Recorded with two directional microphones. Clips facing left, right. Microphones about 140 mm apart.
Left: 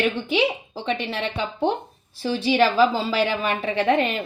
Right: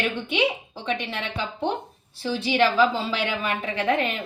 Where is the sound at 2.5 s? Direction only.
35° left (ahead or behind).